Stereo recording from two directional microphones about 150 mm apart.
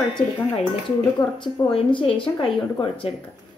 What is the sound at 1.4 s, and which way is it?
Speech, 35° left (ahead or behind).